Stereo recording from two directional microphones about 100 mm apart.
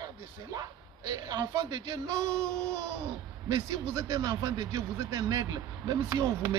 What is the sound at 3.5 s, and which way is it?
Speech, 35° right (ahead or behind).